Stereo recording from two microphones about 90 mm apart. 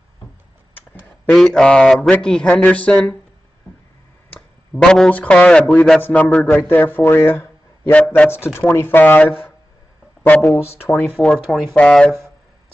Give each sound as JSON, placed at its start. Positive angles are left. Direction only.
{"t": 1.2, "sound": "speech", "side_deg": 10}
{"t": 4.7, "sound": "speech", "side_deg": 5}
{"t": 8.5, "sound": "speech", "side_deg": 25}
{"t": 11.1, "sound": "speech", "side_deg": 5}
{"t": 11.7, "sound": "speech", "side_deg": 10}